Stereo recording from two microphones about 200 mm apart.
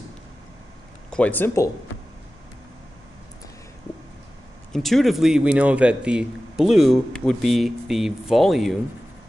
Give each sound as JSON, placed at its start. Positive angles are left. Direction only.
{"t": 1.1, "sound": "speech", "side_deg": 10}
{"t": 4.7, "sound": "speech", "side_deg": 0}